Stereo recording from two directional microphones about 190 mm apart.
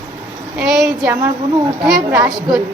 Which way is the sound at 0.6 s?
Centre (ahead or behind).